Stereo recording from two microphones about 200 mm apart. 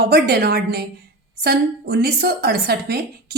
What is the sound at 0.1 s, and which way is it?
A woman's voice, 50° right (ahead or behind).